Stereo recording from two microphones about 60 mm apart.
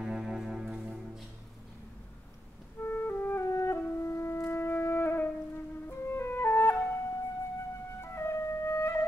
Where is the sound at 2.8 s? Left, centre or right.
Left.